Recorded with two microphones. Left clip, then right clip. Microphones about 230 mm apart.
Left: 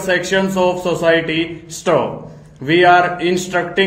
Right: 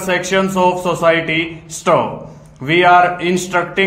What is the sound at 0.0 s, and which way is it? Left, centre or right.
Speech, right.